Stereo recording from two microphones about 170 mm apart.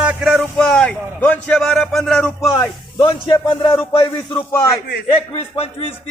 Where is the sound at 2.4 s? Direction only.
20° left (ahead or behind).